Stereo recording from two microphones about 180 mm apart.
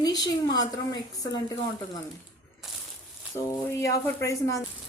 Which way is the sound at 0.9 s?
70° left (ahead or behind).